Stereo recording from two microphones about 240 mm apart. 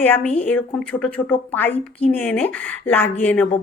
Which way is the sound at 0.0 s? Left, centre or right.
Centre.